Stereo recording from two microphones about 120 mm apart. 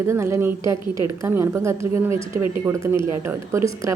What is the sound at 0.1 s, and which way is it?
A woman's voice, 20° right (ahead or behind).